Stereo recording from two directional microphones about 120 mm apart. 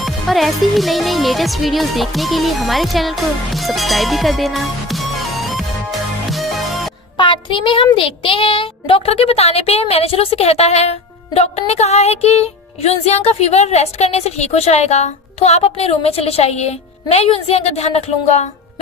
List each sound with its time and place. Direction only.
0.0 s speech: centre (ahead or behind)
7.2 s child singing: 45° left (ahead or behind)
7.9 s speech: 50° left (ahead or behind); by 18.4 s 65° left (ahead or behind)